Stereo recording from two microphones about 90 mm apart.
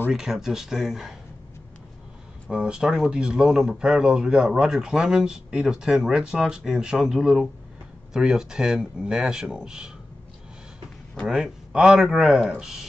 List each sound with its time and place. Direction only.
0.1 s speech: 5° right (ahead or behind)
2.5 s speech: 10° right (ahead or behind)
11.2 s speech: 5° right (ahead or behind)